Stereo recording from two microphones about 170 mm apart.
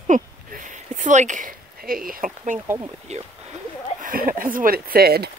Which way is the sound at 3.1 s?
40° right (ahead or behind).